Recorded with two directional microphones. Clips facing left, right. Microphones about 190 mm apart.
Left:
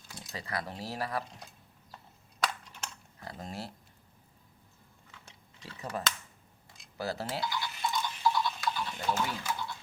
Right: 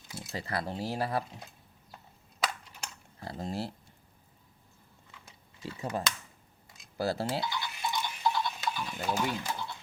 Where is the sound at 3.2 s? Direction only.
30° right (ahead or behind).